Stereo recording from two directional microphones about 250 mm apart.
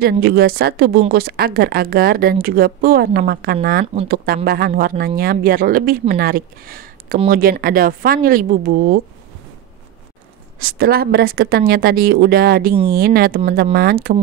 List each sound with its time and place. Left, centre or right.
0.0 s a woman's voice: right
3.8 s speech: right
4.5 s a woman's voice: right
10.6 s a woman's voice: right